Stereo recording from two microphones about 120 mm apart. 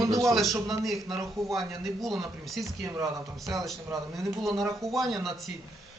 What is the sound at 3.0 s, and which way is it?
A man's voice, 25° right (ahead or behind).